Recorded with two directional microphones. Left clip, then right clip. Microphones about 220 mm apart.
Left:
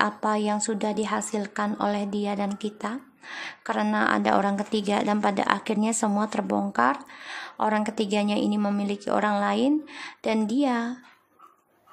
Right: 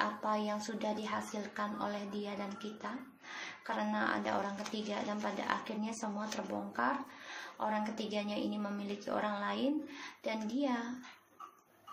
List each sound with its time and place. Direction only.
0.0 s a woman's voice: 50° left (ahead or behind)